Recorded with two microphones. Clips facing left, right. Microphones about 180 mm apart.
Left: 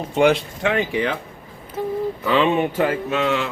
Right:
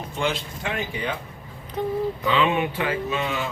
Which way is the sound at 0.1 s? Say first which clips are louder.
Left 11 dB; 70° left (ahead or behind).